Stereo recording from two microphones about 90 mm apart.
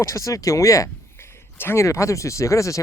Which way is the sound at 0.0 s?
35° left (ahead or behind).